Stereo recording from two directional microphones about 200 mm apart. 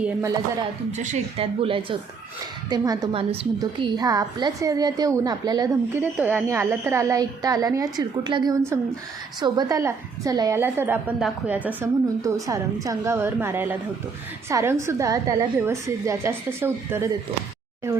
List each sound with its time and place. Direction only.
0.0 s a woman's voice: 15° right (ahead or behind)
0.9 s a woman's voice: 35° right (ahead or behind); by 17.1 s 10° right (ahead or behind)